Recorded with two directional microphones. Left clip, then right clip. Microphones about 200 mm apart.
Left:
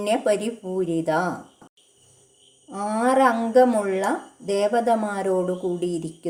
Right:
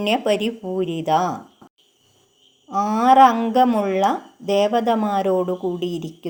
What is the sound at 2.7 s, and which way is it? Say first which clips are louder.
Speech: right 6 dB; 30° right (ahead or behind).